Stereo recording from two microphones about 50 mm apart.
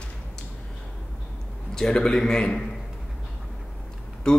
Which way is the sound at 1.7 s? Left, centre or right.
Centre.